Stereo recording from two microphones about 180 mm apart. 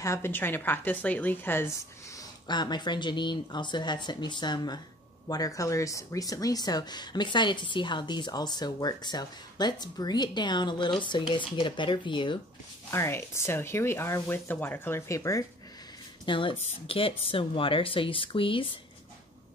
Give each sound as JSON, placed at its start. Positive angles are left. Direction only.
{"t": 0.0, "sound": "speech", "side_deg": 15}
{"t": 12.9, "sound": "speech", "side_deg": 15}
{"t": 16.3, "sound": "speech", "side_deg": 30}